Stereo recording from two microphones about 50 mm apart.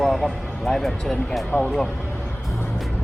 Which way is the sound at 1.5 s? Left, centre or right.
Left.